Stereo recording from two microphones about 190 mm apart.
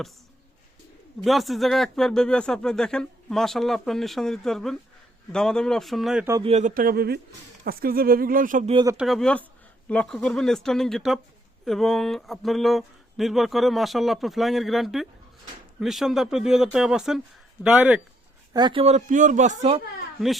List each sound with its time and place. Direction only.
1.2 s speech: centre (ahead or behind)
6.4 s speech: 35° right (ahead or behind)
8.7 s speech: 20° right (ahead or behind)
9.0 s speech: centre (ahead or behind)
18.5 s speech: 25° right (ahead or behind)